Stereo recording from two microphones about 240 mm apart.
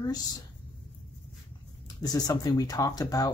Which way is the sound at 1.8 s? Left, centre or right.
Centre.